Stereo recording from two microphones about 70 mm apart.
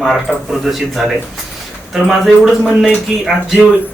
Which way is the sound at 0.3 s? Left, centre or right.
Centre.